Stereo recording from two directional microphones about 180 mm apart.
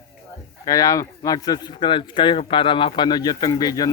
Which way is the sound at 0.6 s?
20° left (ahead or behind).